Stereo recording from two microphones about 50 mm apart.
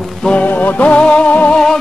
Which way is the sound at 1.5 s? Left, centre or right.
Centre.